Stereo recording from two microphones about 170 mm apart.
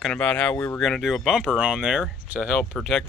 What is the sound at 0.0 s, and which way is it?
Speech, 5° left (ahead or behind).